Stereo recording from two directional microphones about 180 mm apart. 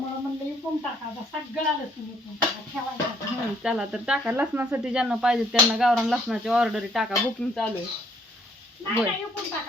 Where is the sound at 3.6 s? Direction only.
5° right (ahead or behind).